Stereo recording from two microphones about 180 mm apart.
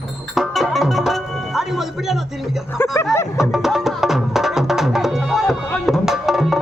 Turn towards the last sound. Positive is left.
turn(degrees=0)  # may be behind; listen again after turning